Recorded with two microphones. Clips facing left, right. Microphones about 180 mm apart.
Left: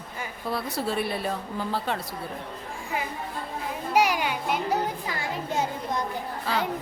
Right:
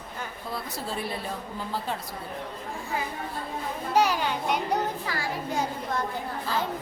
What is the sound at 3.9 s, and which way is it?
Speech, 10° left (ahead or behind).